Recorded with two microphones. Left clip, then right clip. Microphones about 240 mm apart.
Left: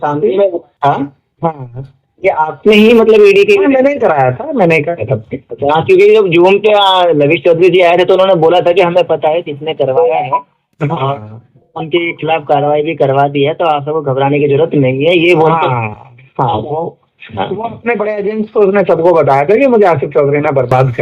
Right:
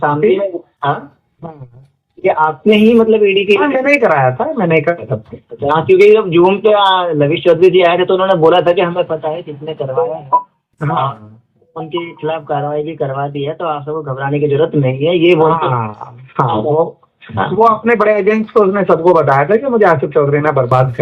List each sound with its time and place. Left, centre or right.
0.0 s a man's voice: left
2.2 s a man's voice: left